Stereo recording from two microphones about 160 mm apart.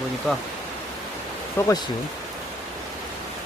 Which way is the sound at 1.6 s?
20° left (ahead or behind).